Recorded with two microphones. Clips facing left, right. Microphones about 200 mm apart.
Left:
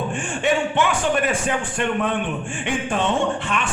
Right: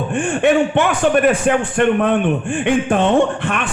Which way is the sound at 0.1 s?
60° right (ahead or behind).